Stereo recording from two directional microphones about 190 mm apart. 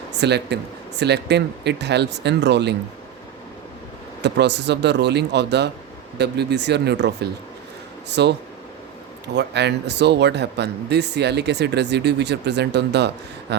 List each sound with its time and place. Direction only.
0.1 s speech: 60° right (ahead or behind)
4.2 s speech: 65° right (ahead or behind)